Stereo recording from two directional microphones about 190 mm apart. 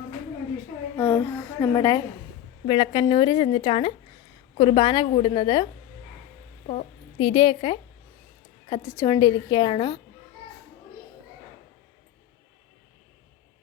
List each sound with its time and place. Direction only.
0.9 s a woman's voice: 10° left (ahead or behind)
6.7 s a woman's voice: 30° left (ahead or behind)